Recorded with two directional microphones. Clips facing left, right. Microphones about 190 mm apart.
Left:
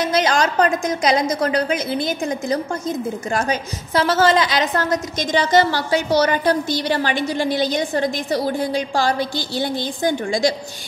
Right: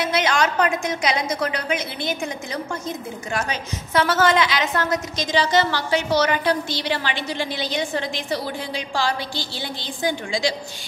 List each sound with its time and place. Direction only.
0.0 s a woman's voice: 40° left (ahead or behind)